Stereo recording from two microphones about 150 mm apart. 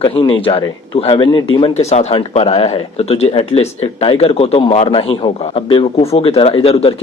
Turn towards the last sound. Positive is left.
turn(degrees=40)  # may be behind; listen again after turning